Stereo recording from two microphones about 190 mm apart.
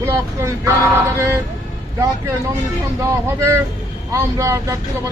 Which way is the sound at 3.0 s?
15° right (ahead or behind).